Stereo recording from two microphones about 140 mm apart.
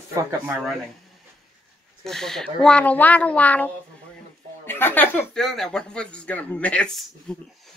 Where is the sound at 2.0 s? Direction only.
5° left (ahead or behind).